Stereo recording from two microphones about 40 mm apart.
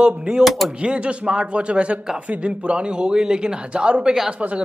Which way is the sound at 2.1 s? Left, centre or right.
Right.